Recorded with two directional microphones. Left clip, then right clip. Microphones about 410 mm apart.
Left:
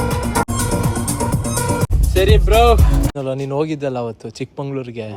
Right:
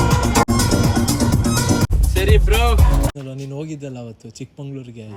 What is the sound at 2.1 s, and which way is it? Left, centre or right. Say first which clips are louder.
Speech: left 6 dB; centre.